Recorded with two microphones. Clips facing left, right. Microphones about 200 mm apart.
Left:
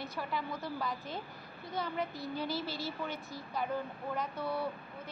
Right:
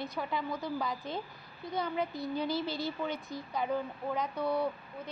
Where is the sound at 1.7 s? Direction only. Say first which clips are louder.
Right 3 dB; centre (ahead or behind).